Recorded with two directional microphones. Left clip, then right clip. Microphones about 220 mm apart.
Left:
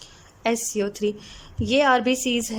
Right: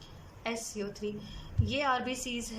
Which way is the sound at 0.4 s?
45° left (ahead or behind).